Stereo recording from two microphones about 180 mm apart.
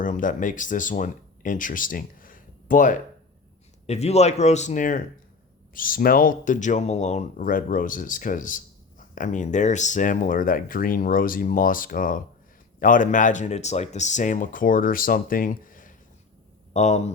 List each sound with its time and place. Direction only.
0.0 s speech: 45° left (ahead or behind)
3.8 s a man's voice: 35° left (ahead or behind)